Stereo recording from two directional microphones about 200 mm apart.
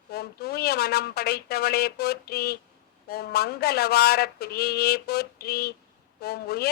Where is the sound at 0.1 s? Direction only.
50° left (ahead or behind).